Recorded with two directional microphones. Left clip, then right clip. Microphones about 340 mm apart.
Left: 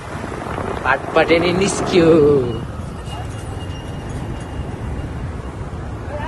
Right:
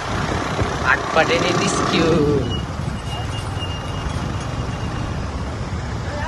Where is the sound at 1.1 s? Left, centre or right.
Centre.